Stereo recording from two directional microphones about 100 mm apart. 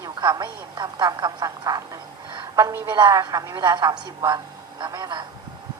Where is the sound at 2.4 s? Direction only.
40° right (ahead or behind).